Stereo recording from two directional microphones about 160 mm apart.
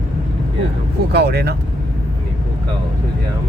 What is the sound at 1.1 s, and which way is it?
Speech, 90° right.